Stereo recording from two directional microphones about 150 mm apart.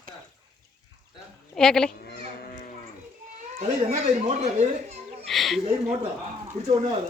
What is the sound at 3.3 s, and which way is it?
A child's voice, 50° right (ahead or behind).